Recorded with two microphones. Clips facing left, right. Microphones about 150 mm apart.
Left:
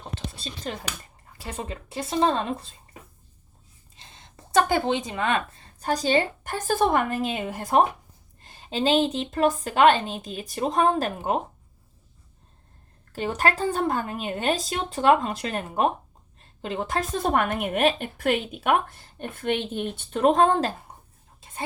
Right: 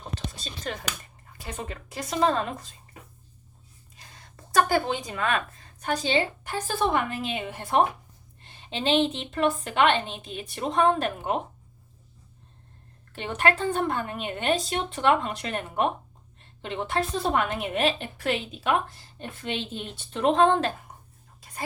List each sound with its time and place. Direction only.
0.1 s whispering: 30° left (ahead or behind)
1.4 s speech: 30° left (ahead or behind)
3.9 s a woman's voice: 25° left (ahead or behind)
13.1 s a woman's voice: 40° left (ahead or behind)
21.4 s whispering: 25° left (ahead or behind)